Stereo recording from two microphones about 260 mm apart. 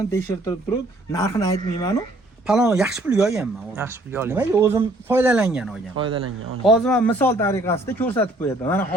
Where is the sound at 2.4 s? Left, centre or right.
Centre.